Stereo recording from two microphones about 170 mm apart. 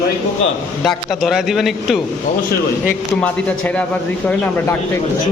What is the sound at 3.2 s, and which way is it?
Speech, 5° left (ahead or behind).